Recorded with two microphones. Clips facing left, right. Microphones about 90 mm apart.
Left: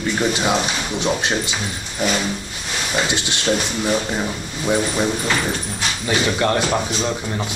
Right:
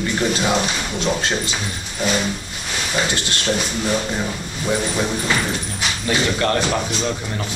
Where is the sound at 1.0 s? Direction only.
20° left (ahead or behind).